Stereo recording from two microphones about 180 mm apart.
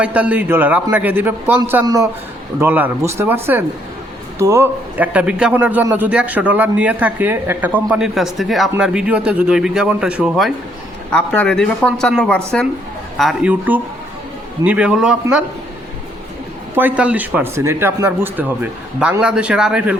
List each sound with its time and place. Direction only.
0.0 s a man's voice: 10° right (ahead or behind)
16.7 s a man's voice: 10° right (ahead or behind)